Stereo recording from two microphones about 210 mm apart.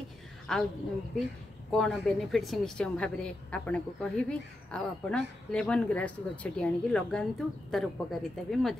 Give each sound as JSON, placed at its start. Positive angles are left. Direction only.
{"t": 0.5, "sound": "a woman's voice", "side_deg": 0}
{"t": 1.7, "sound": "a woman's voice", "side_deg": 0}